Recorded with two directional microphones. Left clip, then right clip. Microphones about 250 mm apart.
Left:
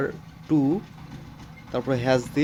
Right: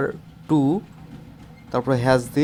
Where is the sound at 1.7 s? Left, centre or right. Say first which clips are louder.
Right 4 dB; centre.